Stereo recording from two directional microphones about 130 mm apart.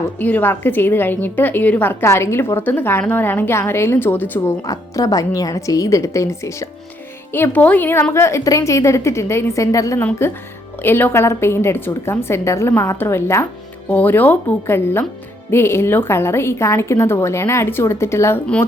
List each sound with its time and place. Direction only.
0.2 s a woman's voice: 15° left (ahead or behind)